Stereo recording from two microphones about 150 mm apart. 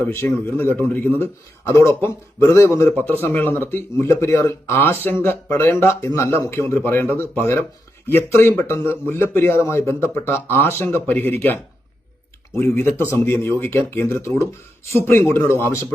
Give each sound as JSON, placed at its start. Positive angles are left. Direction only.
{"t": 0.0, "sound": "a man's voice", "side_deg": 15}